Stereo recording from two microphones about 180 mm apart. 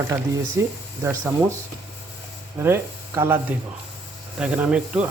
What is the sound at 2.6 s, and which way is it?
Speech, 15° right (ahead or behind).